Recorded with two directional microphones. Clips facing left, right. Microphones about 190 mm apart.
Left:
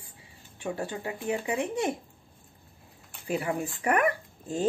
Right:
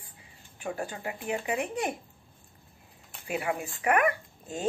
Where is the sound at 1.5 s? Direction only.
30° left (ahead or behind).